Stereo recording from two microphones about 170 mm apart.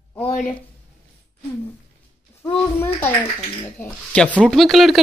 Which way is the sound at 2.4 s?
15° left (ahead or behind).